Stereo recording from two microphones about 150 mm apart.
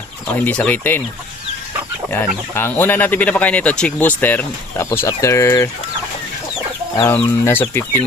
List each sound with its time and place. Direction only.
0.3 s speech: 10° left (ahead or behind)
2.0 s speech: 15° left (ahead or behind)
7.1 s speech: 15° left (ahead or behind)